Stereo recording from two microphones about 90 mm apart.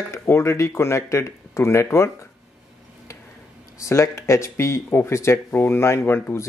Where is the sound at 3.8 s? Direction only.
35° left (ahead or behind).